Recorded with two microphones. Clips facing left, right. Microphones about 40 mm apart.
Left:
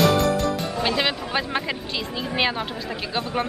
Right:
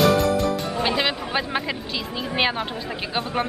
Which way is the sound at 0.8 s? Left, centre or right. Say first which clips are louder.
Even; centre.